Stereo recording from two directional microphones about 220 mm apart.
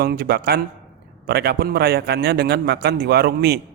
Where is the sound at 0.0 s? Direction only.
45° right (ahead or behind).